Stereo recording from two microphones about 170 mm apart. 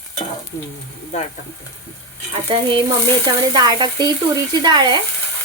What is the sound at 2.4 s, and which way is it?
Speech, 30° right (ahead or behind).